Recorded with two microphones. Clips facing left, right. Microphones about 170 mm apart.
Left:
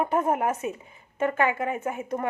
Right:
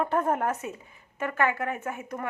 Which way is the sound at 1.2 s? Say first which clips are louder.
Left 3 dB; 20° left (ahead or behind).